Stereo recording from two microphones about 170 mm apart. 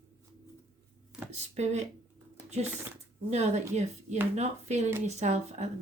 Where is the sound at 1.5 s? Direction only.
40° right (ahead or behind).